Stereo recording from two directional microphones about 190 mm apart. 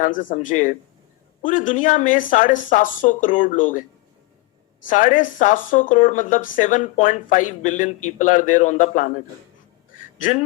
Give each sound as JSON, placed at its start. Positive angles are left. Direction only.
{"t": 0.0, "sound": "speech", "side_deg": 45}
{"t": 4.9, "sound": "speech", "side_deg": 45}